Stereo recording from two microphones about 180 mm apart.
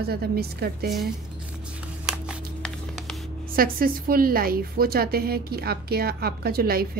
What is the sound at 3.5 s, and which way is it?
A woman's voice, 55° right (ahead or behind).